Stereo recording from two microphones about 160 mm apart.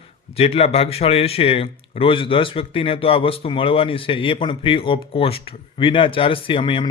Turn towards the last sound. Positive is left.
turn(degrees=30)  # may be behind; listen again after turning